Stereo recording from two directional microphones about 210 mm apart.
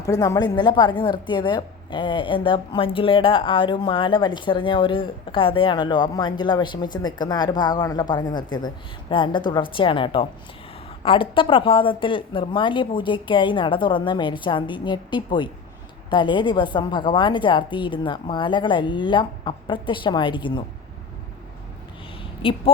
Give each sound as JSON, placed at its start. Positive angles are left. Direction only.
{"t": 0.0, "sound": "speech", "side_deg": 15}
{"t": 22.4, "sound": "speech", "side_deg": 25}